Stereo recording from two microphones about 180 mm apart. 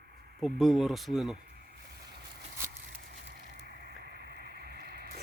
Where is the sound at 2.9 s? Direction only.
55° right (ahead or behind).